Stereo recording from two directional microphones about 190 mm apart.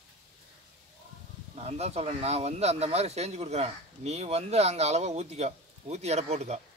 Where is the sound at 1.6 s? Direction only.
35° right (ahead or behind).